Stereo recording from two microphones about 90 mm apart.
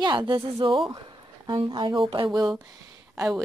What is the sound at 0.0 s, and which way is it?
Speech, 55° right (ahead or behind).